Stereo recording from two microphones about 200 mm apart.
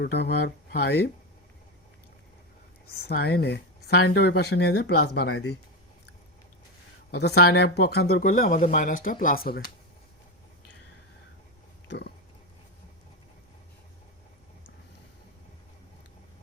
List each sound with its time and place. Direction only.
0.0 s speech: 55° left (ahead or behind)
2.8 s speech: 50° left (ahead or behind)
7.1 s speech: 55° left (ahead or behind)
11.9 s pig: 55° left (ahead or behind)